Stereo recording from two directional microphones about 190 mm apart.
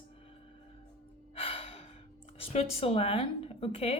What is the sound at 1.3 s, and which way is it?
Gasp, 30° left (ahead or behind).